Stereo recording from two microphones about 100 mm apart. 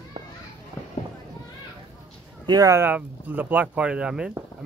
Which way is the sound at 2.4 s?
45° right (ahead or behind).